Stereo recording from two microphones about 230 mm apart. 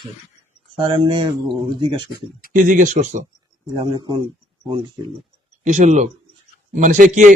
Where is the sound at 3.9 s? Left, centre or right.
Centre.